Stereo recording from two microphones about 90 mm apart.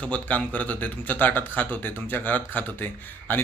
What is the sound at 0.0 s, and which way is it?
Speech, 15° left (ahead or behind).